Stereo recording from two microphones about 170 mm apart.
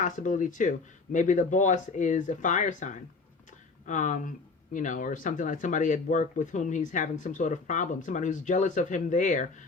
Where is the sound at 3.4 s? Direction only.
50° left (ahead or behind).